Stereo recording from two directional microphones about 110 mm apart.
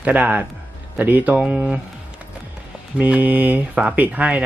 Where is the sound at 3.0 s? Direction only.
15° right (ahead or behind).